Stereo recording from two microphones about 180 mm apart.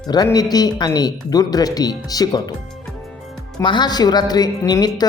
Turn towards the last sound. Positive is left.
turn(degrees=20)  # may be behind; listen again after turning